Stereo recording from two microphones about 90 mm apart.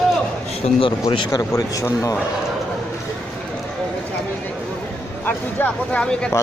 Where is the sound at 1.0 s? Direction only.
40° left (ahead or behind).